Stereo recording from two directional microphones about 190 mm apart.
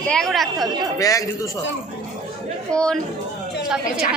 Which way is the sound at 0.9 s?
20° left (ahead or behind).